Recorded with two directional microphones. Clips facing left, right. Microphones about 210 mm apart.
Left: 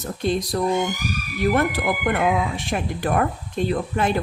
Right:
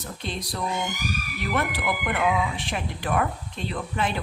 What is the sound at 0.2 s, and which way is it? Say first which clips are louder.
Speech: left 10 dB; 45° left (ahead or behind).